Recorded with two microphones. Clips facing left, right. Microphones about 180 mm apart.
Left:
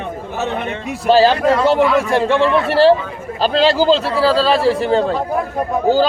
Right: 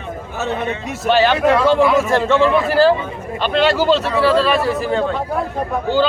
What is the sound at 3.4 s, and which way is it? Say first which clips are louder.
A man's voice: left 2 dB; 35° left (ahead or behind).